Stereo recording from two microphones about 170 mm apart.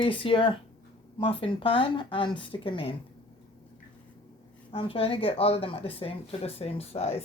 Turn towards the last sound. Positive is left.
turn(degrees=35)  # may be behind; listen again after turning